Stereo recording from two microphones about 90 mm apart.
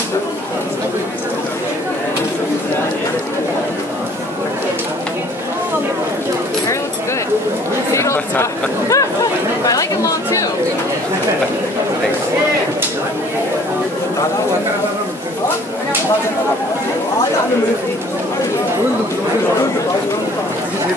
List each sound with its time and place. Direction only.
7.9 s chatter: 30° left (ahead or behind)